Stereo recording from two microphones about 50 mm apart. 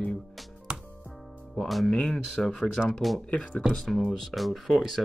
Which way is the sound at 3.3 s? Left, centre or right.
Left.